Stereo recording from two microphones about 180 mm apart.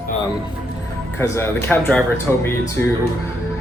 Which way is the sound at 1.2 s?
15° left (ahead or behind).